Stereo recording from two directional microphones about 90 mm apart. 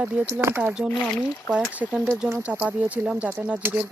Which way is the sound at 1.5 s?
15° right (ahead or behind).